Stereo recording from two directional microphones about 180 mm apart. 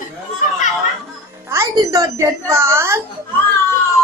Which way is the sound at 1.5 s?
15° right (ahead or behind).